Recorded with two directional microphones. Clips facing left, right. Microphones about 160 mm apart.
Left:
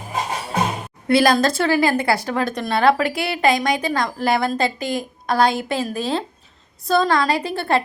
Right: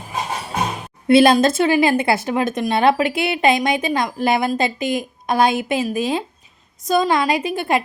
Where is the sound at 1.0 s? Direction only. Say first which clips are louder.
Right 4 dB; 25° right (ahead or behind).